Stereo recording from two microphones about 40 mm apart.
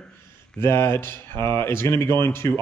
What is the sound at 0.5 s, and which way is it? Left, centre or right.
Speech, left.